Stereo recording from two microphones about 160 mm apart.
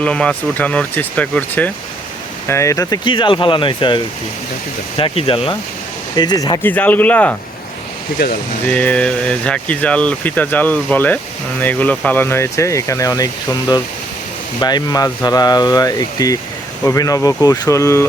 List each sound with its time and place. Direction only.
0.0 s speech: 5° left (ahead or behind); by 5.5 s 35° left (ahead or behind)
6.1 s speech: 25° left (ahead or behind)
6.7 s speech: 10° left (ahead or behind)
8.6 s speech: 10° left (ahead or behind)